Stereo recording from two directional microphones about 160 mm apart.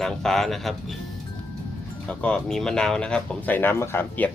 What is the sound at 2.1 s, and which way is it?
Speech, 5° left (ahead or behind).